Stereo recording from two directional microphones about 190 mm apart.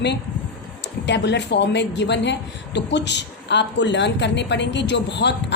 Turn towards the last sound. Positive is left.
turn(degrees=65)  # may be behind; listen again after turning